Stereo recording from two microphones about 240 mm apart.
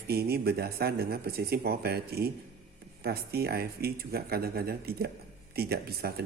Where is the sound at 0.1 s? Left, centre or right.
Right.